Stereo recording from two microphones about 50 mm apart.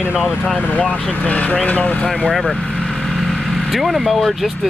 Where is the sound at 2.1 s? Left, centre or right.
Centre.